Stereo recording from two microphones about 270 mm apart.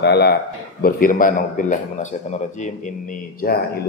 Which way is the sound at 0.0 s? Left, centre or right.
Left.